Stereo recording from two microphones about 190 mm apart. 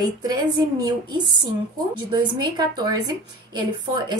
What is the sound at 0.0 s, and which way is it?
A woman's voice, 20° right (ahead or behind).